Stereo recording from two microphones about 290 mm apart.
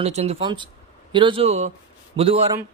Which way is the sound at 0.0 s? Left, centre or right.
Right.